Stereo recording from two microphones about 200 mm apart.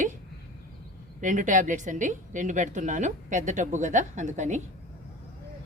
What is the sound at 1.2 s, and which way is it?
A woman's voice, 40° right (ahead or behind).